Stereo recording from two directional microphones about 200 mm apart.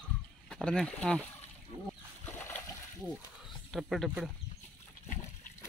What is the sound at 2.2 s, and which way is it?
Boat, 10° left (ahead or behind).